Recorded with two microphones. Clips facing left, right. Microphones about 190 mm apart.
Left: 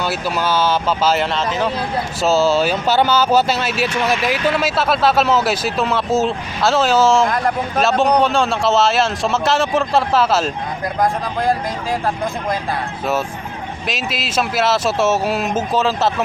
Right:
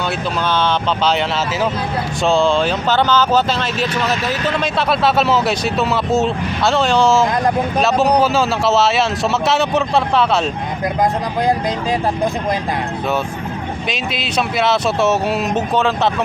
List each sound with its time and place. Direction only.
0.4 s speech: 5° left (ahead or behind)
11.0 s speech: 20° right (ahead or behind)
13.8 s speech: centre (ahead or behind)